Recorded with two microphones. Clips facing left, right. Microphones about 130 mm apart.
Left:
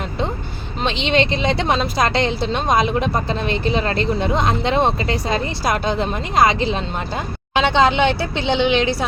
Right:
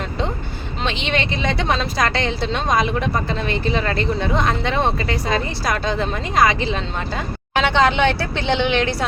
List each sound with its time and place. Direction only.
0.9 s speech: 20° left (ahead or behind)